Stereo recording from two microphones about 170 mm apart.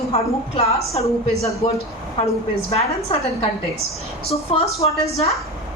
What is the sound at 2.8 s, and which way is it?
A woman's voice, 35° left (ahead or behind).